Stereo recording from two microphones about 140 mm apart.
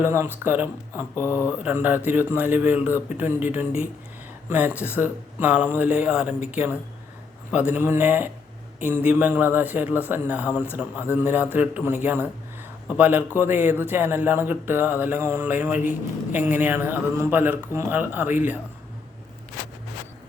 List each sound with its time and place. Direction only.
0.0 s speech: 15° right (ahead or behind)